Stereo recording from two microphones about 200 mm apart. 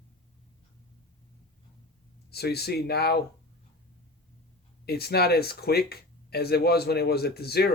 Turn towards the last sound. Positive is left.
turn(degrees=50)  # may be behind; listen again after turning